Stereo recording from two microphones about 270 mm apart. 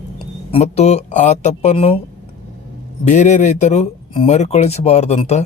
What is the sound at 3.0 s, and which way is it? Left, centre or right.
Speech, left.